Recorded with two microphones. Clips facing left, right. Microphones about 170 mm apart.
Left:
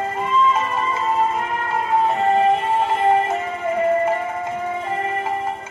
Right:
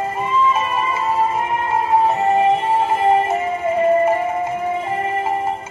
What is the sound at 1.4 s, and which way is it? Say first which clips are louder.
Music: right 3 dB; 20° right (ahead or behind).